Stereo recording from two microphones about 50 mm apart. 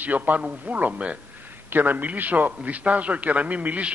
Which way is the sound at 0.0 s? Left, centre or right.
Right.